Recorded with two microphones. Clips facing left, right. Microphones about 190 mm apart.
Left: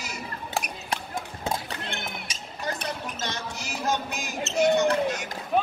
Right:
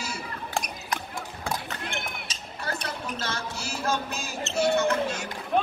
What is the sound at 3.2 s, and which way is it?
Music, 20° left (ahead or behind).